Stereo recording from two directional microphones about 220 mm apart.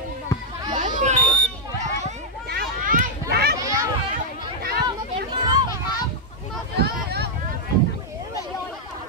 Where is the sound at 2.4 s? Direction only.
40° right (ahead or behind).